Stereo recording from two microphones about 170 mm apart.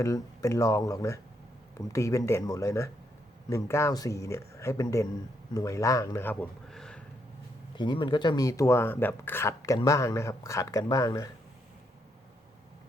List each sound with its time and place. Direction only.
0.0 s speech: 20° left (ahead or behind); by 7.0 s 5° left (ahead or behind)
7.8 s speech: 25° left (ahead or behind)